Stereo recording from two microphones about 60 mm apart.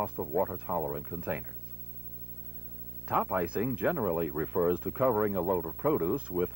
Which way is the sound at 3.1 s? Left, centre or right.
Centre.